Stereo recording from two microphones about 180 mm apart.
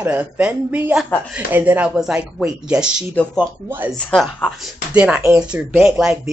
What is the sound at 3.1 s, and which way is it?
Speech, 5° left (ahead or behind).